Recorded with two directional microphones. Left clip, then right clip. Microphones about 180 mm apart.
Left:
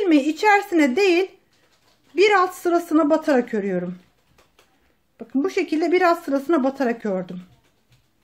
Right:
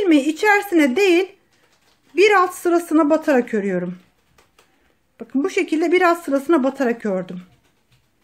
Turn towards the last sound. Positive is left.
turn(degrees=-20)  # may be behind; listen again after turning